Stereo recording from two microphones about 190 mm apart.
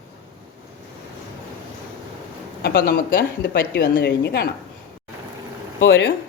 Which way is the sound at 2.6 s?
55° left (ahead or behind).